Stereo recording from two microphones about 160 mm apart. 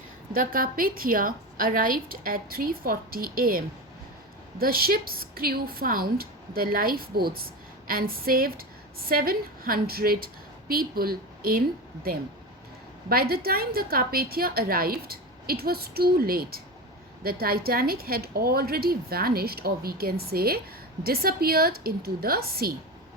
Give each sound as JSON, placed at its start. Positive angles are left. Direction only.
{"t": 0.3, "sound": "a woman's voice", "side_deg": -60}
{"t": 4.6, "sound": "a woman's voice", "side_deg": -70}
{"t": 13.1, "sound": "a woman's voice", "side_deg": -70}